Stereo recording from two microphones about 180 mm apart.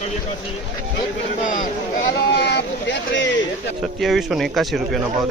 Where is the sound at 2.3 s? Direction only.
70° left (ahead or behind).